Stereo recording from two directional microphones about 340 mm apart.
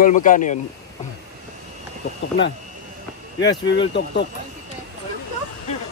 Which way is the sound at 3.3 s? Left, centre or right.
Left.